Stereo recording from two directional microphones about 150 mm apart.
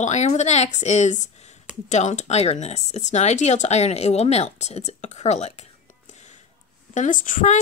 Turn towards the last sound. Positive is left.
turn(degrees=55)  # may be behind; listen again after turning